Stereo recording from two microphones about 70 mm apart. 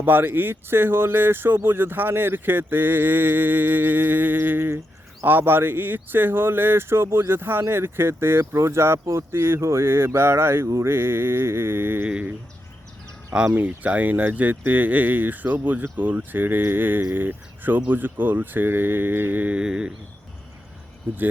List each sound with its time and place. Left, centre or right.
0.0 s speech: right
13.5 s speech: right